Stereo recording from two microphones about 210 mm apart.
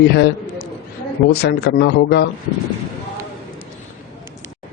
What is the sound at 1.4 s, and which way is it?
Speech, 50° left (ahead or behind).